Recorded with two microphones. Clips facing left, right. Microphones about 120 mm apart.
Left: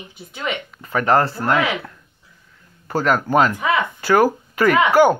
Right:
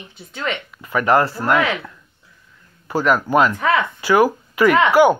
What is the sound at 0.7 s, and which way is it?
Speech, 40° left (ahead or behind).